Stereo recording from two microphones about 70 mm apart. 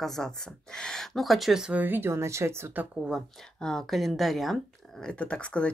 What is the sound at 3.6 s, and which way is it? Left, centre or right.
Speech, centre.